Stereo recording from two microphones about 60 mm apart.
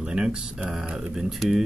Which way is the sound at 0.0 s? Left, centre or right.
Centre.